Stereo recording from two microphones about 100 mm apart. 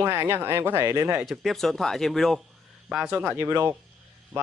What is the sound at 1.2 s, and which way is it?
Speech, centre (ahead or behind).